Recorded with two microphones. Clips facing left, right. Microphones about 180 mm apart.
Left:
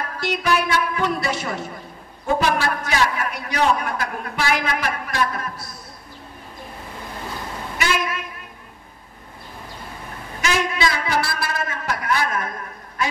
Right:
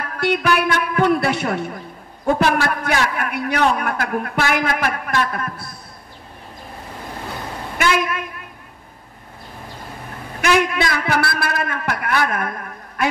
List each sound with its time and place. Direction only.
0.2 s a man's voice: 60° right (ahead or behind)
7.7 s a sound: 55° right (ahead or behind)
10.4 s a man's voice: 60° right (ahead or behind)